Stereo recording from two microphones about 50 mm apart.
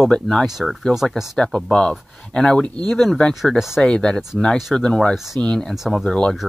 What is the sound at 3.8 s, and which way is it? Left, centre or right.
Speech, centre.